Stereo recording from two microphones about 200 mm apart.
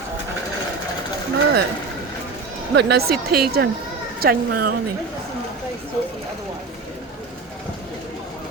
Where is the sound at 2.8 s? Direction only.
50° right (ahead or behind).